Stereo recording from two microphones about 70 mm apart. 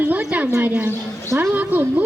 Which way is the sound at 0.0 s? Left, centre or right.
Right.